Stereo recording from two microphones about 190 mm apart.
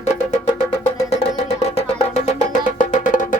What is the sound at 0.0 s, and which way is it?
Music, 40° left (ahead or behind).